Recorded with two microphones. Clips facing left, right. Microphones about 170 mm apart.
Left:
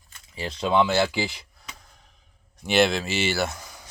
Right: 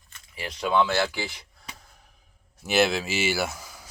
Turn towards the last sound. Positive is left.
turn(degrees=-5)  # may be behind; listen again after turning